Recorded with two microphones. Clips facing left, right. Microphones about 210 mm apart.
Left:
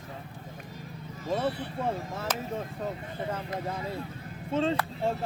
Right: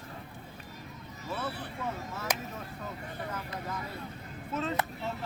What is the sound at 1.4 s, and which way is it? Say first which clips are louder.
Speech: left 4 dB; 30° left (ahead or behind).